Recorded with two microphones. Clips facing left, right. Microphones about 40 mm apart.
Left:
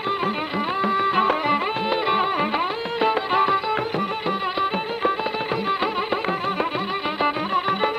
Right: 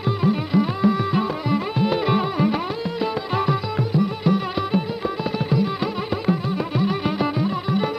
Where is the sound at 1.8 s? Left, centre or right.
Left.